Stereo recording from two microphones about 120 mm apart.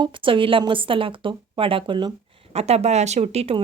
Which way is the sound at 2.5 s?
60° right (ahead or behind).